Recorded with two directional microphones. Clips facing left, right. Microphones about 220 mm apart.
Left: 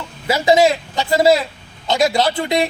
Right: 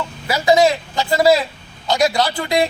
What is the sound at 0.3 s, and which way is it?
Speech, 25° left (ahead or behind).